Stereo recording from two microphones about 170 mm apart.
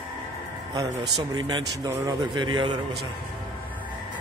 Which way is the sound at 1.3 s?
25° right (ahead or behind).